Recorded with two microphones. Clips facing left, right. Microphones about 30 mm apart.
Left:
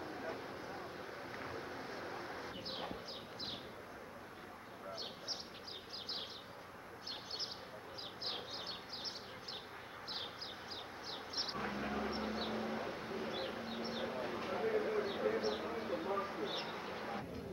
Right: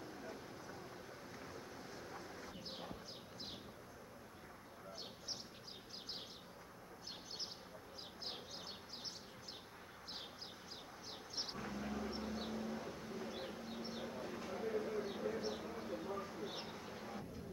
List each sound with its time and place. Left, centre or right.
0.0 s vehicle: left
1.3 s a sound: left
11.1 s vehicle: left